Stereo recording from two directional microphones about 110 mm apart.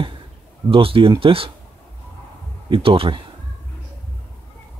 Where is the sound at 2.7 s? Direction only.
55° right (ahead or behind).